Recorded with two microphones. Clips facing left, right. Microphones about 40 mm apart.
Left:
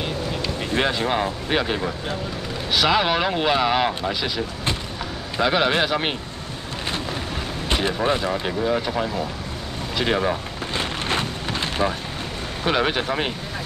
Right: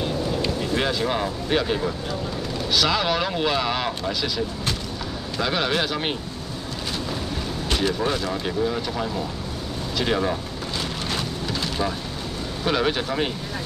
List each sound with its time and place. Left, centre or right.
0.6 s speech: left
7.7 s speech: left
10.8 s a sound: left
12.6 s speech: left